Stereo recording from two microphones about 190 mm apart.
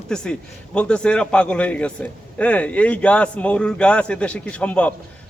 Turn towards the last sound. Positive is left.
turn(degrees=5)  # may be behind; listen again after turning